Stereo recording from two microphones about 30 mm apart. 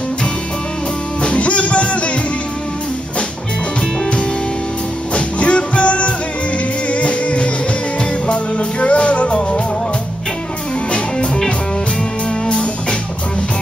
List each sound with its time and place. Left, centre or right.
1.2 s music: left
5.1 s music: left